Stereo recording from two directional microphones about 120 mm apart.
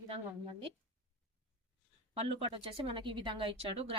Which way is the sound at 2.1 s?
50° right (ahead or behind).